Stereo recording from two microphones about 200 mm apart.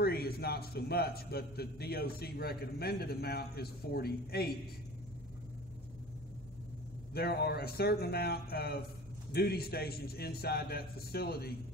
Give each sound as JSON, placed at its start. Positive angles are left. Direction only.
{"t": 0.0, "sound": "a man's voice", "side_deg": 50}
{"t": 7.2, "sound": "a man's voice", "side_deg": 50}